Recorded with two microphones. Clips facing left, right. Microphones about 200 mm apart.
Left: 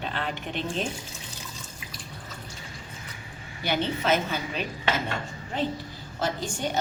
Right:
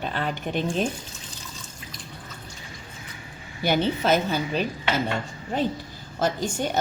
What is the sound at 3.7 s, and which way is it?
Speech, 40° right (ahead or behind).